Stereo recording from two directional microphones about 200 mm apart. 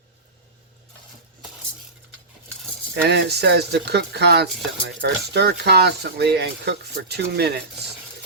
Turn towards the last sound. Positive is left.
turn(degrees=-55)  # may be behind; listen again after turning